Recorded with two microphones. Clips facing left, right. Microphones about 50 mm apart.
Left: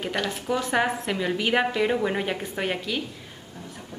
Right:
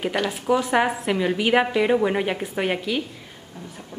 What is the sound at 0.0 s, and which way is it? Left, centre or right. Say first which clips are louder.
A woman's voice: right 4 dB; centre.